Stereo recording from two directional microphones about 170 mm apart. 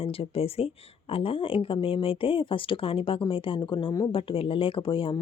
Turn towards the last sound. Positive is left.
turn(degrees=30)  # may be behind; listen again after turning